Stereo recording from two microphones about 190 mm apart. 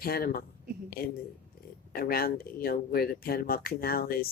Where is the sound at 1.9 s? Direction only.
55° left (ahead or behind).